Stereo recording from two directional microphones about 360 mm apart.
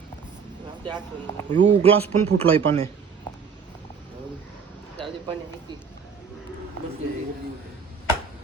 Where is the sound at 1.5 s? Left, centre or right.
Centre.